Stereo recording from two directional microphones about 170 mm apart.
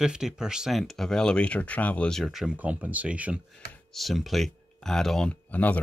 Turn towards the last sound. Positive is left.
turn(degrees=10)  # may be behind; listen again after turning